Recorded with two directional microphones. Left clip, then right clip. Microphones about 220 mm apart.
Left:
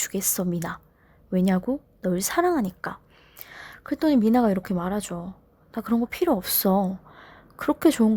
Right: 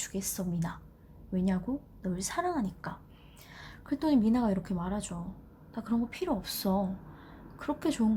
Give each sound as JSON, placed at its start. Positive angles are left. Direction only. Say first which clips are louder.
{"t": 0.0, "sound": "a woman's voice", "louder": "left 9 dB", "side_deg": 50}